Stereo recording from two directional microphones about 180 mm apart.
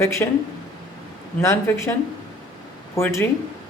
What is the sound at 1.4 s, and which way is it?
Speech, 15° left (ahead or behind).